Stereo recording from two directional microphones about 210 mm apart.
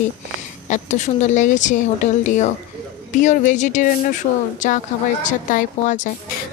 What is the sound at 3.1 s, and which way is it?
Speech, 35° left (ahead or behind).